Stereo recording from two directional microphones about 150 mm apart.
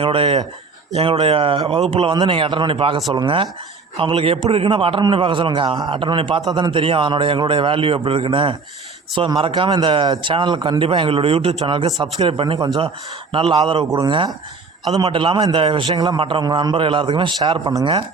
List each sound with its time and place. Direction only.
0.0 s a man's voice: 35° right (ahead or behind)